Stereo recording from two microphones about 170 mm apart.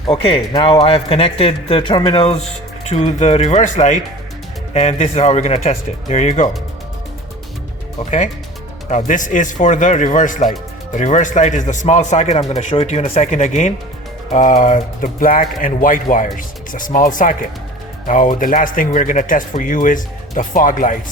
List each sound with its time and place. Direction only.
0.0 s speech: 30° left (ahead or behind)
2.8 s speech: 40° left (ahead or behind)
8.9 s speech: 45° left (ahead or behind)